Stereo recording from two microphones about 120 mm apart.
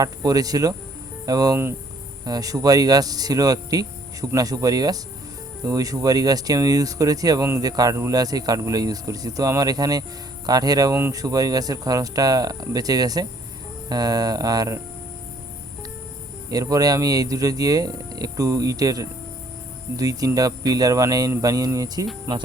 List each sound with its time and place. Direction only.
0.0 s speech: 30° right (ahead or behind)
16.5 s speech: 30° right (ahead or behind)